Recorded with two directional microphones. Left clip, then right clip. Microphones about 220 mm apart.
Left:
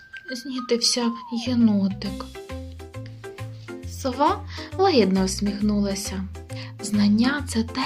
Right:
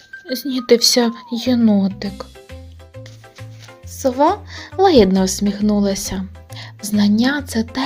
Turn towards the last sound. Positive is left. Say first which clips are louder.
# right 5 dB
turn(degrees=-20)  # may be behind; listen again after turning